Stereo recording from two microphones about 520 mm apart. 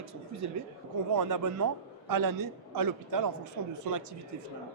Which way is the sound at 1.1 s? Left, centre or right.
Right.